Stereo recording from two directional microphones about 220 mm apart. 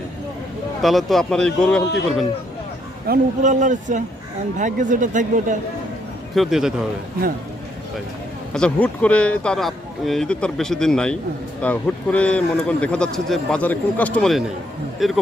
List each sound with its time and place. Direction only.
0.8 s speech: centre (ahead or behind)
3.1 s speech: 35° right (ahead or behind)
6.3 s speech: centre (ahead or behind)
8.5 s speech: 5° left (ahead or behind)